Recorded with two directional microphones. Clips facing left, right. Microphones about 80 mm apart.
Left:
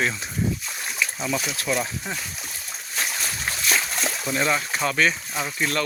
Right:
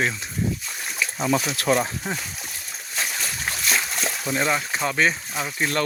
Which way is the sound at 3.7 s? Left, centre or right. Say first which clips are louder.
Even; centre.